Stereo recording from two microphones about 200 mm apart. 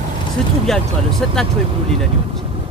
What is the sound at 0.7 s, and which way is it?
Speech, centre (ahead or behind).